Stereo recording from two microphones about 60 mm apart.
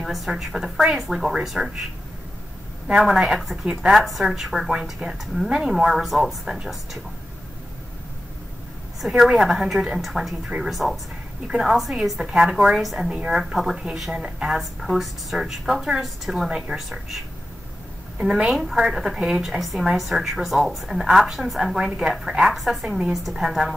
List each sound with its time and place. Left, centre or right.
0.0 s a woman's voice: centre
2.9 s a woman's voice: centre
9.2 s a woman's voice: centre
12.8 s a woman's voice: centre
18.2 s a woman's voice: centre